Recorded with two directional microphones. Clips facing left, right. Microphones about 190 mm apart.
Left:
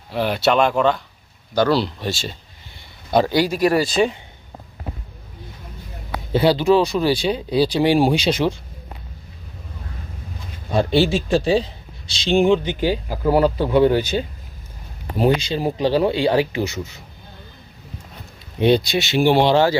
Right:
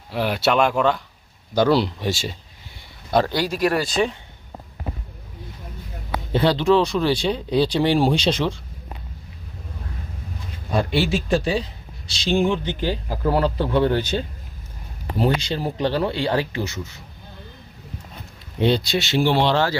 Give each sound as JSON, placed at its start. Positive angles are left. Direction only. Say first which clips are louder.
{"t": 0.1, "sound": "speech", "louder": "left 2 dB", "side_deg": -5}
{"t": 1.5, "sound": "speech", "louder": "even", "side_deg": -20}
{"t": 3.1, "sound": "speech", "louder": "left 3 dB", "side_deg": 5}
{"t": 6.4, "sound": "speech", "louder": "left 2 dB", "side_deg": 5}
{"t": 10.9, "sound": "speech", "louder": "left 4 dB", "side_deg": 30}
{"t": 18.6, "sound": "speech", "louder": "left 3 dB", "side_deg": 15}